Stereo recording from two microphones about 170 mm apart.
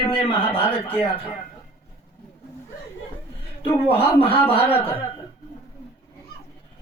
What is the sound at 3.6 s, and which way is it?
A man's voice, 35° left (ahead or behind).